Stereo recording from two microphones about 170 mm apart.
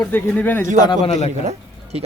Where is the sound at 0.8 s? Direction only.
25° left (ahead or behind).